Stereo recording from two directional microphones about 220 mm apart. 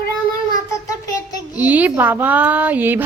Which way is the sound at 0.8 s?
15° left (ahead or behind).